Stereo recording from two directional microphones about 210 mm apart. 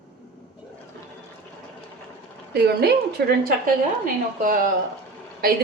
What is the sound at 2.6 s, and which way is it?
Speech, 50° right (ahead or behind).